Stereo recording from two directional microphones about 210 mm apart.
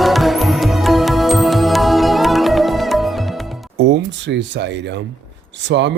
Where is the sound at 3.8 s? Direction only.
60° right (ahead or behind).